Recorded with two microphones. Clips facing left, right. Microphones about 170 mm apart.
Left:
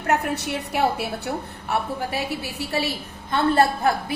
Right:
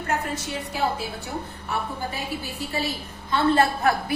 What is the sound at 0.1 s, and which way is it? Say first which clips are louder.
A woman's voice: left 6 dB; 65° left (ahead or behind).